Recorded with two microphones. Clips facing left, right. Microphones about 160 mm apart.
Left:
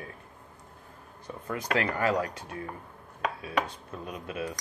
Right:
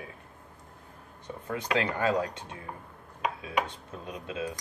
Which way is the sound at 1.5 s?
20° right (ahead or behind).